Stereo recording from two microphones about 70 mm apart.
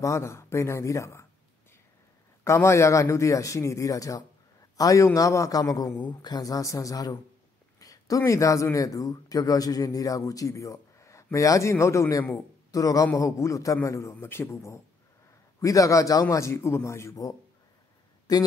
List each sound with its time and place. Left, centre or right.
0.0 s a man's voice: left
2.4 s a man's voice: left
5.9 s speech: left
7.8 s a sound: left
8.2 s a man's voice: left
12.7 s a man's voice: left
18.3 s speech: left